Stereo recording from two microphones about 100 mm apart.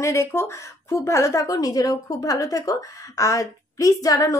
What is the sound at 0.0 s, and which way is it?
Speech, 30° left (ahead or behind).